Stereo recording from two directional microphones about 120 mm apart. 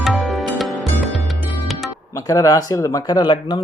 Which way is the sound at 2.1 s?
30° left (ahead or behind).